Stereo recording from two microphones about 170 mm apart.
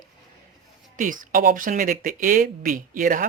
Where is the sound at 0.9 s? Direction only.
50° right (ahead or behind).